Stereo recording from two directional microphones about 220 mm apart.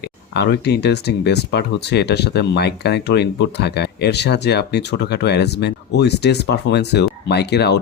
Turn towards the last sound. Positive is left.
turn(degrees=50)  # may be behind; listen again after turning